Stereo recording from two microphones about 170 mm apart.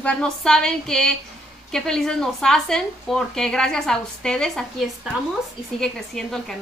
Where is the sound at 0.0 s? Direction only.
5° left (ahead or behind).